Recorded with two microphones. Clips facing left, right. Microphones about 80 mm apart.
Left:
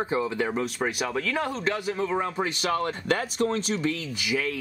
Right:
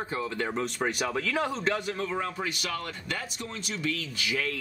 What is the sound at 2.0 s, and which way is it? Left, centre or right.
Speech, centre.